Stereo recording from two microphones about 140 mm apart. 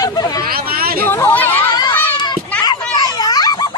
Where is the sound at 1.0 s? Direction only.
15° left (ahead or behind).